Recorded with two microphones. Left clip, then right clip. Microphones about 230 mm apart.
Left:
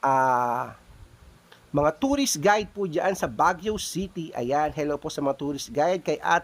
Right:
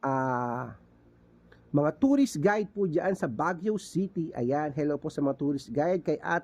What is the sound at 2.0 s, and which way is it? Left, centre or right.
Speech, centre.